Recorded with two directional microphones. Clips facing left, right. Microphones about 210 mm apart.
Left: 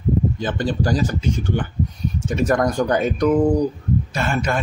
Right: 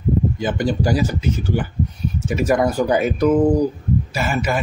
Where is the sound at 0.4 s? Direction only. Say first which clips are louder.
Right 2 dB; 10° right (ahead or behind).